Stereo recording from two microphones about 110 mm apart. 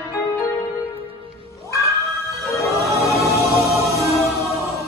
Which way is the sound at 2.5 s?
30° left (ahead or behind).